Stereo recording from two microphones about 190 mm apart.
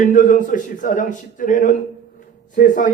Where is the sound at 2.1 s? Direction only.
45° left (ahead or behind).